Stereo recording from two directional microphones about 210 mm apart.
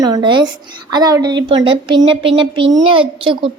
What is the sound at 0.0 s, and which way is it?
A woman's voice, 20° right (ahead or behind).